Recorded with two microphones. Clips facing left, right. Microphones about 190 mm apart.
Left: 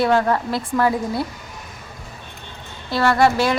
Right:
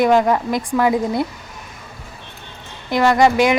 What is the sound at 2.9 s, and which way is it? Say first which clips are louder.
Speech: right 3 dB; 15° right (ahead or behind).